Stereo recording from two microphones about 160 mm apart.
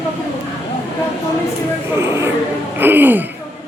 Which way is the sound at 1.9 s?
15° right (ahead or behind).